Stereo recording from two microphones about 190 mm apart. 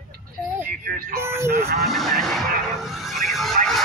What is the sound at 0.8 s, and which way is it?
Music, 50° right (ahead or behind).